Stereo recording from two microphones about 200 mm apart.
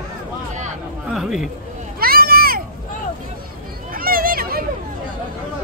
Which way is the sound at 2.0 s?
50° right (ahead or behind).